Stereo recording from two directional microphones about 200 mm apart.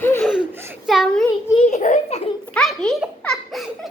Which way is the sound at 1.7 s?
35° left (ahead or behind).